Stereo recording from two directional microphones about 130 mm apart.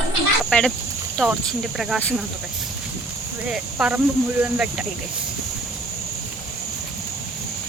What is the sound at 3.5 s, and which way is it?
Speech, 10° right (ahead or behind).